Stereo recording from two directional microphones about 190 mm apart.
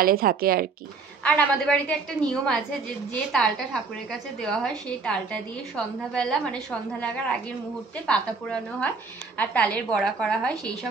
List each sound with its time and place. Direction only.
0.0 s speech: 50° right (ahead or behind)
1.2 s a woman's voice: 5° left (ahead or behind)